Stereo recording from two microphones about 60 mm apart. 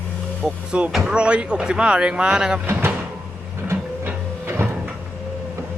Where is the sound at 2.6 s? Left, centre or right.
Right.